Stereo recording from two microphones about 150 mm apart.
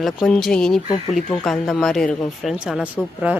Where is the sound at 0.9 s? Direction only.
50° left (ahead or behind).